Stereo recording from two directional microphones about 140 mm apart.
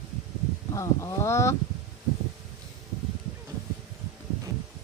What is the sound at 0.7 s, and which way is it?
Speech, 20° left (ahead or behind).